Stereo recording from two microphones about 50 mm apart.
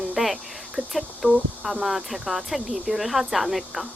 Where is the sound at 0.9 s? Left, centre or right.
Centre.